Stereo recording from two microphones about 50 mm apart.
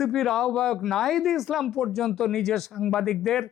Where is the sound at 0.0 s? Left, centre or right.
Centre.